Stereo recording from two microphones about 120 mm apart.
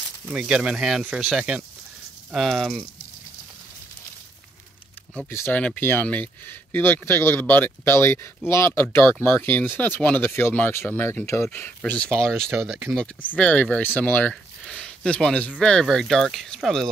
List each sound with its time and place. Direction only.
0.3 s speech: 5° right (ahead or behind)
5.3 s speech: 20° left (ahead or behind)
12.5 s speech: 5° right (ahead or behind)
12.9 s speech: 10° left (ahead or behind)